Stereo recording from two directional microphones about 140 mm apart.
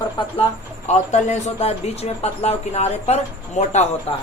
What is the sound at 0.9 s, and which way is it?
A man's voice, 55° left (ahead or behind).